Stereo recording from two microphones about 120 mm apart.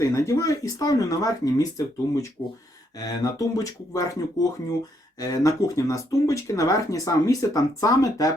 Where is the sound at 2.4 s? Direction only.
15° left (ahead or behind).